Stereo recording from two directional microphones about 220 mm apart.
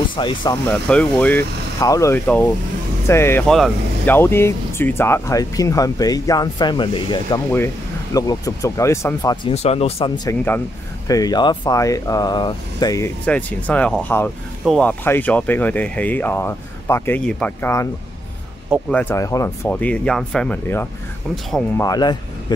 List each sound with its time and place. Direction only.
0.1 s speech: 20° left (ahead or behind)
0.7 s speech: 5° left (ahead or behind)
9.5 s speech: 30° left (ahead or behind); by 17.8 s 10° left (ahead or behind)
18.9 s speech: 10° left (ahead or behind)
21.8 s speech: 15° left (ahead or behind)